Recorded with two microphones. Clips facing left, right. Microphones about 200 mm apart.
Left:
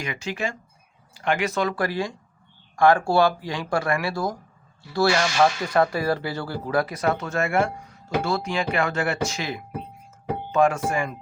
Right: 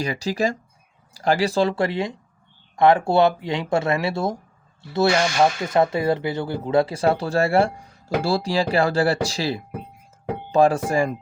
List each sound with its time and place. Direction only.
0.0 s speech: 35° right (ahead or behind)